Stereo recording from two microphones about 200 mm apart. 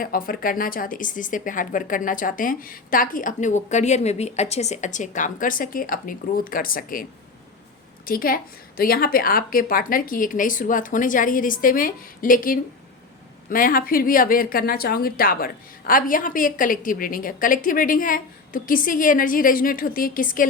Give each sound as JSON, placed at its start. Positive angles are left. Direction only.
{"t": 0.0, "sound": "speech", "side_deg": 45}